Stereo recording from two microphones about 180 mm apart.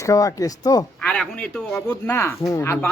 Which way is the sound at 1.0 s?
5° left (ahead or behind).